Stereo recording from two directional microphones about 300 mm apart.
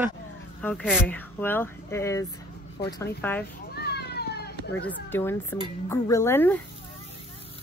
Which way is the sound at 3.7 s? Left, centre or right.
Left.